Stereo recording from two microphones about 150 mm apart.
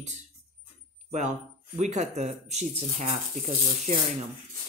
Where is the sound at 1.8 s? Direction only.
50° right (ahead or behind).